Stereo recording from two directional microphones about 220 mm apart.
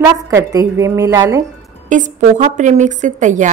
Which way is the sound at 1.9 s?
35° right (ahead or behind).